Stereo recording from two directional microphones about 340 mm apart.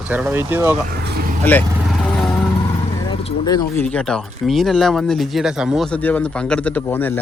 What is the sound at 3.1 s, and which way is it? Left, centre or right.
A man's voice, centre.